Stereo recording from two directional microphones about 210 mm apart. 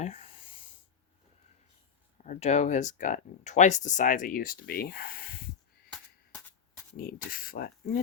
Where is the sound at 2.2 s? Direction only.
35° left (ahead or behind).